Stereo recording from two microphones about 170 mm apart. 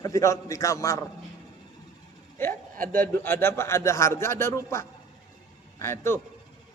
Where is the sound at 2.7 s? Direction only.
55° right (ahead or behind).